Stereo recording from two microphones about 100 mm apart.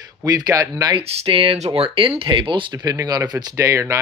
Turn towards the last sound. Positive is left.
turn(degrees=-30)  # may be behind; listen again after turning